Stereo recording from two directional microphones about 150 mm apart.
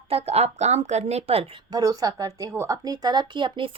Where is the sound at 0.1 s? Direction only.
40° right (ahead or behind).